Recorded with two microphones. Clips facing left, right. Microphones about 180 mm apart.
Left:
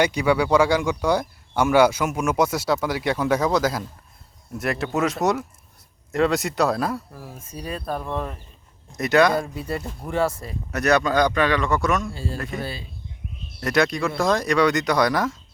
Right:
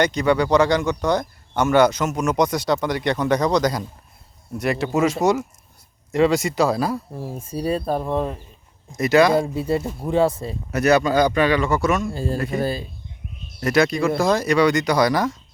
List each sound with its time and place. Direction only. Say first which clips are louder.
0.0 s a man's voice: right 1 dB; 10° left (ahead or behind)
7.1 s speech: right 8 dB; 30° right (ahead or behind)
8.9 s a man's voice: right 2 dB; centre (ahead or behind)
9.3 s speech: right 6 dB; 25° right (ahead or behind)
10.7 s a man's voice: right 3 dB; 5° right (ahead or behind)
12.1 s speech: right 6 dB; 45° right (ahead or behind)
13.6 s a man's voice: right 3 dB; centre (ahead or behind)